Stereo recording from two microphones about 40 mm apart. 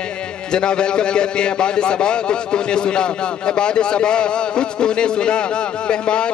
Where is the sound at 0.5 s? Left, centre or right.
Left.